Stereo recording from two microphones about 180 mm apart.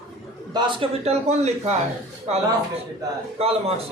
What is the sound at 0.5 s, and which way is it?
A man's voice, 30° right (ahead or behind).